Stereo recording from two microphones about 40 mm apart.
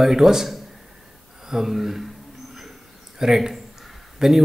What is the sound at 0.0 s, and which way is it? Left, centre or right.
Speech, centre.